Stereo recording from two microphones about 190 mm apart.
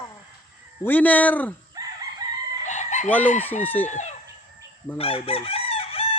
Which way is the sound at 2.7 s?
40° left (ahead or behind).